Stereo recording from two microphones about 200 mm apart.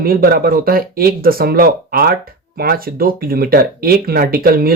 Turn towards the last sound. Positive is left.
turn(degrees=-50)  # may be behind; listen again after turning